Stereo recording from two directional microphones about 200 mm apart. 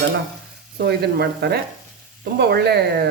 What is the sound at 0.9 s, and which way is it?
Speech, 55° right (ahead or behind).